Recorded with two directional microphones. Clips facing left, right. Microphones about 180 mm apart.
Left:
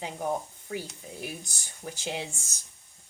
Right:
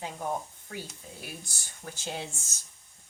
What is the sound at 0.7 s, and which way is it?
Speech, 15° left (ahead or behind).